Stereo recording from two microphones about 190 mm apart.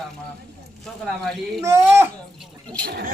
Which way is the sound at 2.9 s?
60° right (ahead or behind).